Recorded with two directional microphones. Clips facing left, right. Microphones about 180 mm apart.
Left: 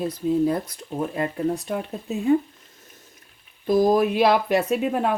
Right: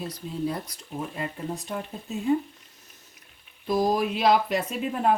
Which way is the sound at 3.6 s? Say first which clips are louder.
Left 6 dB; 50° left (ahead or behind).